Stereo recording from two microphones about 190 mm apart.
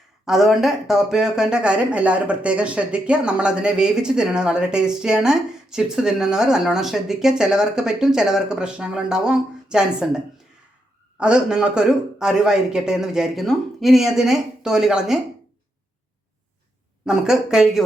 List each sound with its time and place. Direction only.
0.3 s speech: centre (ahead or behind)
11.2 s speech: 5° right (ahead or behind)
17.1 s speech: 5° right (ahead or behind)